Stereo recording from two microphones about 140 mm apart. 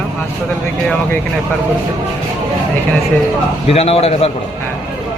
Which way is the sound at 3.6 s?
45° left (ahead or behind).